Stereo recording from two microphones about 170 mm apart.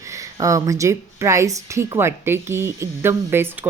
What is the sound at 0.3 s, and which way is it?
A woman's voice, 20° right (ahead or behind).